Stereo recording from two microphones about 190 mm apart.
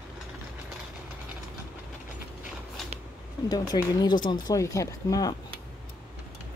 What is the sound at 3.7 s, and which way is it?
Speech, 30° left (ahead or behind).